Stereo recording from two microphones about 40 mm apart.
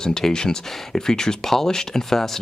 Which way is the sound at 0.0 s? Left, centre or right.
Centre.